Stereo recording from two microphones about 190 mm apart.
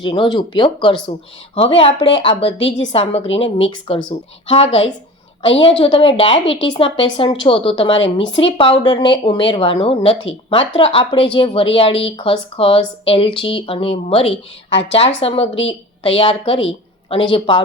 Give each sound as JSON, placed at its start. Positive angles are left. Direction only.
{"t": 0.0, "sound": "a woman's voice", "side_deg": 25}
{"t": 7.9, "sound": "speech", "side_deg": 75}
{"t": 8.4, "sound": "a woman's voice", "side_deg": 30}